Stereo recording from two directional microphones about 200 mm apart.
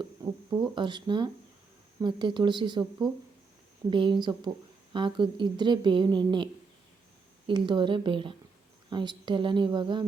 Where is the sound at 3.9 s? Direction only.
25° right (ahead or behind).